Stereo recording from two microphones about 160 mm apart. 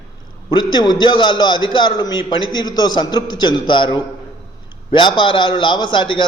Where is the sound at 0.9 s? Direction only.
30° left (ahead or behind).